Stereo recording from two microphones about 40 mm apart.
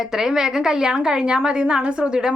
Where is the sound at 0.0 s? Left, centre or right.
Centre.